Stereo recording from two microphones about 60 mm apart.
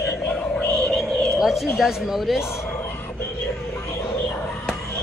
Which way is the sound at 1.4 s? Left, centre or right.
Centre.